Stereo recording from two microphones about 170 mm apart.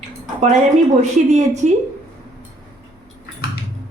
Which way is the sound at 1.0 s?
45° right (ahead or behind).